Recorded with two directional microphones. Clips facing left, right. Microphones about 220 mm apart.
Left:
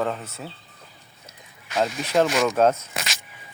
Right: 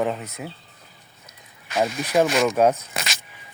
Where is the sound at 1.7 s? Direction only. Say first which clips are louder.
Right 1 dB; 10° right (ahead or behind).